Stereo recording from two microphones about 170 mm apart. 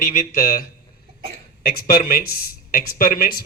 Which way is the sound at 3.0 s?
60° left (ahead or behind).